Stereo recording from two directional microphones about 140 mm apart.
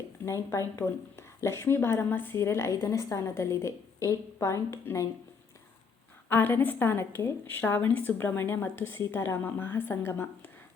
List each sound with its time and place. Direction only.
0.3 s a woman's voice: 20° left (ahead or behind)
6.2 s a woman's voice: 15° left (ahead or behind)